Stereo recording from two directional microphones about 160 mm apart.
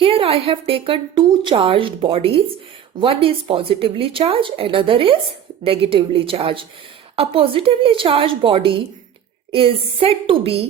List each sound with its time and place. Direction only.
0.0 s a woman's voice: 35° right (ahead or behind)